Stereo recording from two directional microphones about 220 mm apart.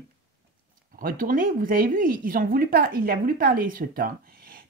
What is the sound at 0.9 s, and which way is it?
Speech, 40° right (ahead or behind).